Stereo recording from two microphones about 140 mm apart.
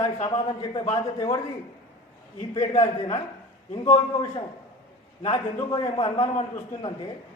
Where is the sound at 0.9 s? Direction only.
30° left (ahead or behind).